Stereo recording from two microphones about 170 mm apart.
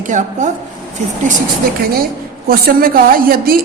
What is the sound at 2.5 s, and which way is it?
A woman's voice, 60° right (ahead or behind).